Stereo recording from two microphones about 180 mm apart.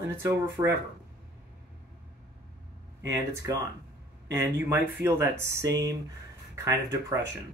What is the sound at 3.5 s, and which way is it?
Speech, 20° right (ahead or behind).